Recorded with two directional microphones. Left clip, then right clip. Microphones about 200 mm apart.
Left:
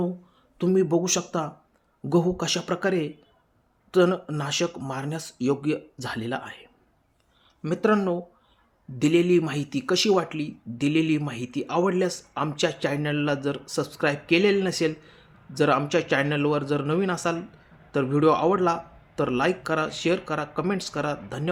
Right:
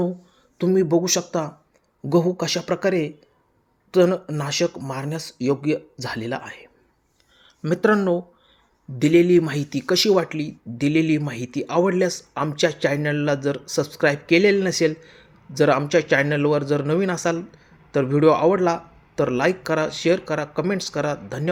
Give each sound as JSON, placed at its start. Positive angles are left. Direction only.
{"t": 0.6, "sound": "speech", "side_deg": -10}
{"t": 7.4, "sound": "speech", "side_deg": -25}